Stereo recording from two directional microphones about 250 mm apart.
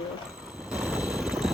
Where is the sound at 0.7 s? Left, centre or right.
Centre.